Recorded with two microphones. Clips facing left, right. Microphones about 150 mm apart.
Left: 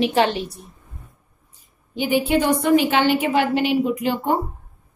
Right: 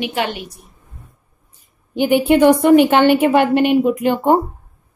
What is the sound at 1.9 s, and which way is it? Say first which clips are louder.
A woman's voice: right 6 dB; 60° right (ahead or behind).